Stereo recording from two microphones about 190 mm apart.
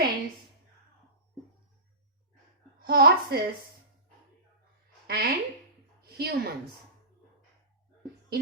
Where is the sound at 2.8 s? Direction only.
55° right (ahead or behind).